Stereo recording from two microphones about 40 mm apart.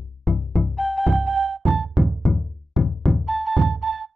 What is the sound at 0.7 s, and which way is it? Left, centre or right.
Music, centre.